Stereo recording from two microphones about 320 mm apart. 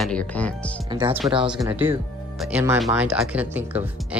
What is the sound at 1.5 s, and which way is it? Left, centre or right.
Speech, centre.